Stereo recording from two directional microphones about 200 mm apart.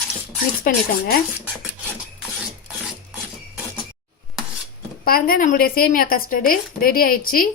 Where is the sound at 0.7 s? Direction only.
45° left (ahead or behind).